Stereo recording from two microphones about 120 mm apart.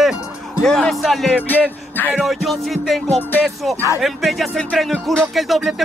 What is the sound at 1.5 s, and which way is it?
Music, 15° left (ahead or behind).